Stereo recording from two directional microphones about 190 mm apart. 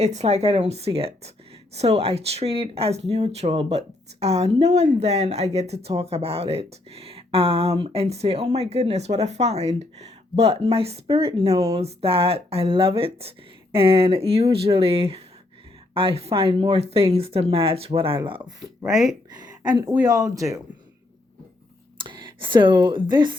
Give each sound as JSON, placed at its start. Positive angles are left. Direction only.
{"t": 0.0, "sound": "speech", "side_deg": -35}
{"t": 11.5, "sound": "speech", "side_deg": -20}
{"t": 11.8, "sound": "speech", "side_deg": -30}
{"t": 21.9, "sound": "speech", "side_deg": -25}